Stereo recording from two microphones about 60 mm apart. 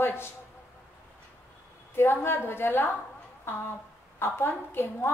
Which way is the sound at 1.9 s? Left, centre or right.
Left.